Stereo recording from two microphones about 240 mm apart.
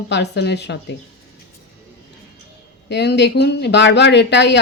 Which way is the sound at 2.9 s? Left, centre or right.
Left.